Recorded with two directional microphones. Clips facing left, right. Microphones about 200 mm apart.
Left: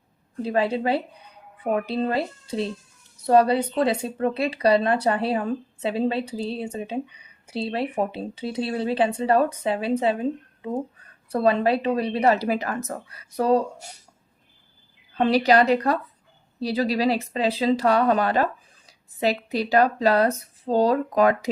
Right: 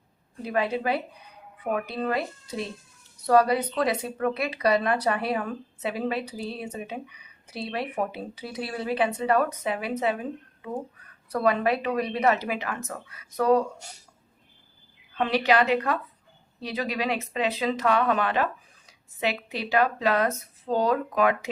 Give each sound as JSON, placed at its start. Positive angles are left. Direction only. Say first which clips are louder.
{"t": 0.4, "sound": "speech", "louder": "left 3 dB", "side_deg": 30}
{"t": 15.2, "sound": "speech", "louder": "left 4 dB", "side_deg": 35}